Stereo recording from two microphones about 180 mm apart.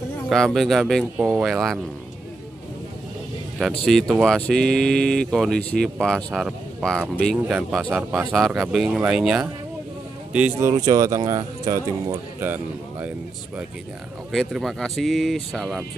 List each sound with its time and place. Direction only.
0.3 s speech: centre (ahead or behind)
3.8 s speech: centre (ahead or behind)
10.7 s speech: 20° right (ahead or behind)
14.3 s speech: centre (ahead or behind)